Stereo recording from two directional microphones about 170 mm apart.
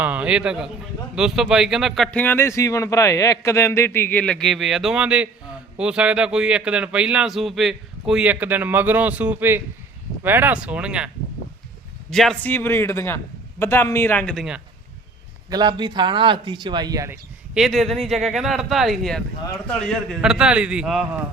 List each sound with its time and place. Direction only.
0.0 s speech: 10° right (ahead or behind)
12.1 s speech: 5° left (ahead or behind)
15.4 s speech: 25° right (ahead or behind)
17.5 s speech: centre (ahead or behind)